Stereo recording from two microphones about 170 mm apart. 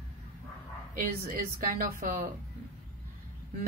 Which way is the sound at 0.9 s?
55° right (ahead or behind).